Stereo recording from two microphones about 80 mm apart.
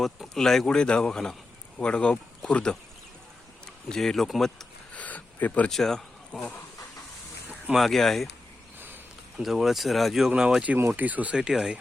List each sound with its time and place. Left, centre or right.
0.0 s speech: centre
3.8 s speech: centre
4.9 s a sound: centre
5.7 s speech: centre
7.8 s speech: centre
9.4 s speech: centre